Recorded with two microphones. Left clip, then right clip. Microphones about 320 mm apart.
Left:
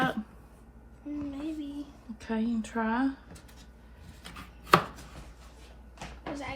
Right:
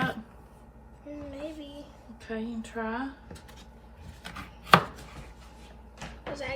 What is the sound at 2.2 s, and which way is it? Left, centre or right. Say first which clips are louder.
Speech: left 3 dB; left.